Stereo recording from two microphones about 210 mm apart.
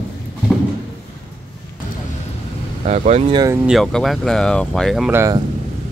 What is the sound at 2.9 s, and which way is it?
Speech, 30° right (ahead or behind).